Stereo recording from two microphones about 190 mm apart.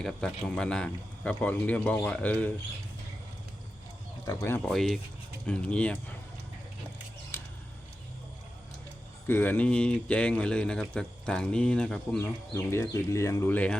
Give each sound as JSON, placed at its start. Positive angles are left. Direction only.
{"t": 0.0, "sound": "speech", "side_deg": 0}
{"t": 4.3, "sound": "speech", "side_deg": 15}
{"t": 4.7, "sound": "speech", "side_deg": 0}
{"t": 7.3, "sound": "a sound", "side_deg": 15}
{"t": 9.2, "sound": "speech", "side_deg": 10}